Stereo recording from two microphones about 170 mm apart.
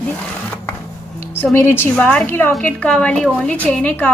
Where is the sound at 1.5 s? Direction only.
15° left (ahead or behind).